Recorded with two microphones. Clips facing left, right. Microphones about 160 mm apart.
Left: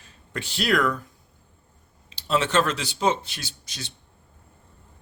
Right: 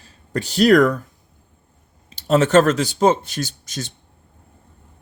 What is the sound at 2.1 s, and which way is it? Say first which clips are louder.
Speech: right 8 dB; 45° right (ahead or behind).